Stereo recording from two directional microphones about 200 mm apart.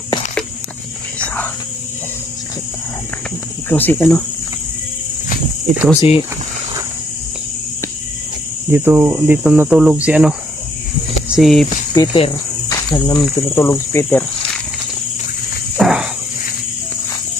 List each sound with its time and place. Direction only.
3.6 s speech: 10° left (ahead or behind)
5.9 s speech: 30° left (ahead or behind)
8.6 s speech: 10° right (ahead or behind)
10.0 s cricket: 5° right (ahead or behind)
11.3 s cricket: centre (ahead or behind)
11.9 s cricket: 20° left (ahead or behind)
13.0 s speech: 5° left (ahead or behind)
15.8 s a sound: 5° right (ahead or behind)